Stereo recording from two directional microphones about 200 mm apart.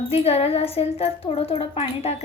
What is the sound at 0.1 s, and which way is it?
A woman's voice, 30° left (ahead or behind).